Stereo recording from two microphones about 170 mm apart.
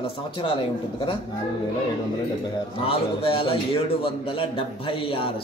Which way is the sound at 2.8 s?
35° left (ahead or behind).